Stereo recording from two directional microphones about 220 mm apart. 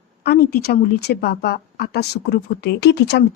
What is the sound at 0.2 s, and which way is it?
A woman's voice, 45° left (ahead or behind).